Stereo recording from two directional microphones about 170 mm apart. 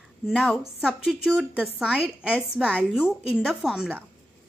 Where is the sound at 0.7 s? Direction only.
5° right (ahead or behind).